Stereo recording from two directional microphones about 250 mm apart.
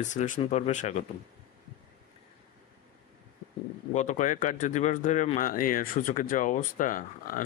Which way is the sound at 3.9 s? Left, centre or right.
Left.